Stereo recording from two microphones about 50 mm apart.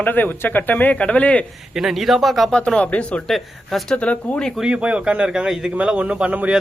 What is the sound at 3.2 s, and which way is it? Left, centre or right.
Speech, centre.